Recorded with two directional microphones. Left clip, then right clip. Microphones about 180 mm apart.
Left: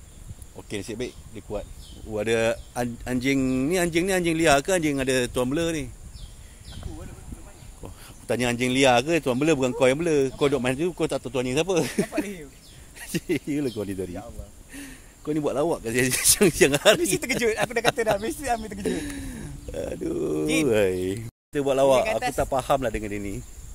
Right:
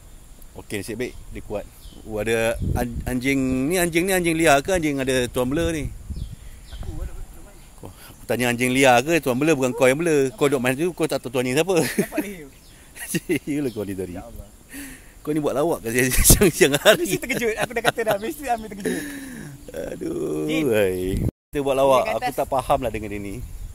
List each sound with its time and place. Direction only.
0.6 s speech: 20° right (ahead or behind)
2.0 s speech: centre (ahead or behind)
7.8 s speech: 10° right (ahead or behind)
12.1 s a man's voice: centre (ahead or behind)
12.9 s speech: 15° right (ahead or behind)
17.2 s speech: 15° left (ahead or behind)
18.8 s a man's voice: centre (ahead or behind)
22.0 s speech: 20° left (ahead or behind)
22.3 s a man's voice: centre (ahead or behind)